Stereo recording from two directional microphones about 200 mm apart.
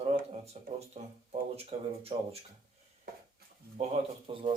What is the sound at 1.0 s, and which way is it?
Speech, 30° right (ahead or behind).